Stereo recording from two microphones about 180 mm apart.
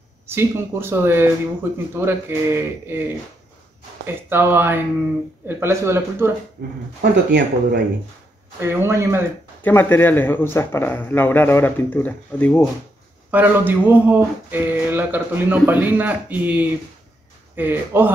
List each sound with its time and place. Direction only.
0.3 s speech: 15° right (ahead or behind)
6.6 s speech: 55° right (ahead or behind)
7.0 s speech: 70° right (ahead or behind)
8.5 s speech: 15° right (ahead or behind)
9.6 s a man's voice: 10° left (ahead or behind)
13.3 s speech: 10° right (ahead or behind)